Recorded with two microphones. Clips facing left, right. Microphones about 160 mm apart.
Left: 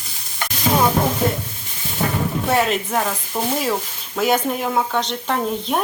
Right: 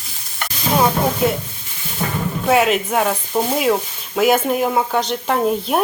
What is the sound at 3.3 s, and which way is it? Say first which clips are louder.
Sizzle: right 4 dB; 20° right (ahead or behind).